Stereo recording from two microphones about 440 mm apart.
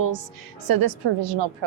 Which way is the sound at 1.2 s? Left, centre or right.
Right.